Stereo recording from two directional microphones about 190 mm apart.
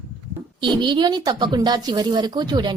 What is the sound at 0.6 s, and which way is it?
A woman's voice, 25° right (ahead or behind).